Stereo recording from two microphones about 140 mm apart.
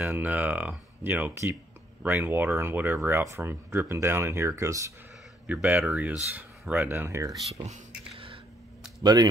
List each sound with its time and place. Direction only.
0.1 s speech: 10° right (ahead or behind)
5.5 s speech: 10° right (ahead or behind)
9.0 s speech: 30° right (ahead or behind)